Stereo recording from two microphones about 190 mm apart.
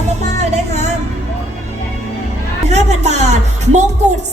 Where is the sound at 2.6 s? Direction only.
35° right (ahead or behind).